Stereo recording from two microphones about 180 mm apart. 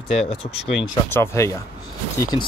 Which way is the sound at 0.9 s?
15° left (ahead or behind).